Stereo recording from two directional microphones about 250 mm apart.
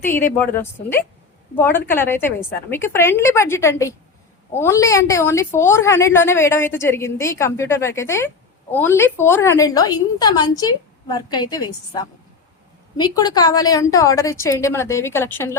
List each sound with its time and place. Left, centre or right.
0.3 s a woman's voice: centre